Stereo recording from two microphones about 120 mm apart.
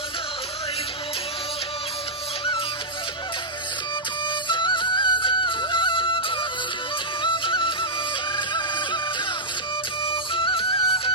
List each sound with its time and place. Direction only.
4.4 s music: 40° left (ahead or behind)
10.1 s music: 45° left (ahead or behind)